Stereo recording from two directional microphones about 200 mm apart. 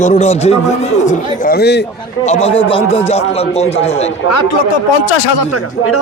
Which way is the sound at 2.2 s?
30° left (ahead or behind).